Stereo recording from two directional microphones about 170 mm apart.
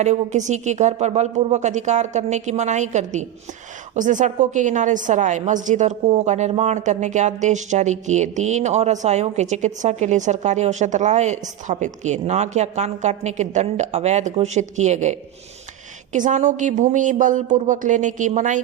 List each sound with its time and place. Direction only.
0.0 s speech: 45° right (ahead or behind)